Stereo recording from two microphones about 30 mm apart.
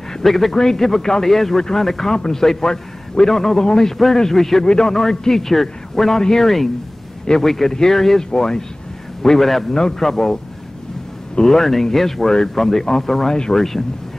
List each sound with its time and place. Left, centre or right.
0.2 s a man's voice: centre; by 3.9 s left
4.2 s a man's voice: centre
9.8 s a man's voice: centre
11.4 s a man's voice: centre